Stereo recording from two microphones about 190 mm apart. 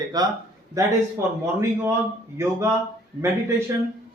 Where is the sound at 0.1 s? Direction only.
20° right (ahead or behind).